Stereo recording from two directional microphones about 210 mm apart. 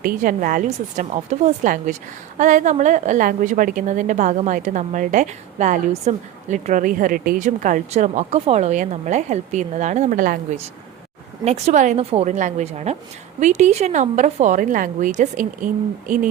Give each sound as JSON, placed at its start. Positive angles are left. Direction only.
{"t": 0.0, "sound": "a woman's voice", "side_deg": -40}